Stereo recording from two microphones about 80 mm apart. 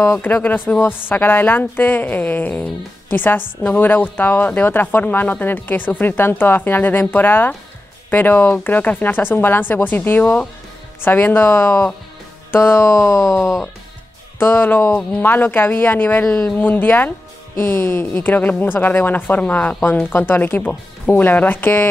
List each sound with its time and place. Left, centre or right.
0.0 s a woman's voice: left
13.4 s speech: centre
14.4 s a woman's voice: left
16.3 s speech: centre
16.5 s a woman's voice: left